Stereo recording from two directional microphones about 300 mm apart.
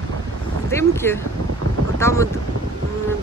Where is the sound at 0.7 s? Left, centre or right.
Centre.